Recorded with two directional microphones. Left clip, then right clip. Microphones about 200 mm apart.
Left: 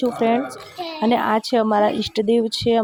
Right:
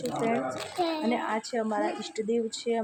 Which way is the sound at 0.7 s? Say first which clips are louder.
Right 1 dB; 35° right (ahead or behind).